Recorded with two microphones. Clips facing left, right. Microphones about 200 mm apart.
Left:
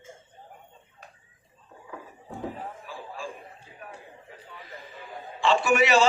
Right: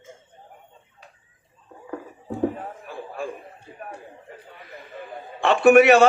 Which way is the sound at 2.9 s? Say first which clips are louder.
Right 6 dB; 60° right (ahead or behind).